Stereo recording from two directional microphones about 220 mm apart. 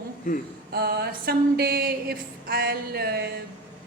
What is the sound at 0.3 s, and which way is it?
Speech, 35° left (ahead or behind).